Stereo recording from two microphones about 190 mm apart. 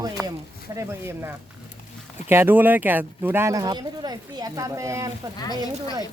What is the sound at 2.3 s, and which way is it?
Speech, 10° right (ahead or behind).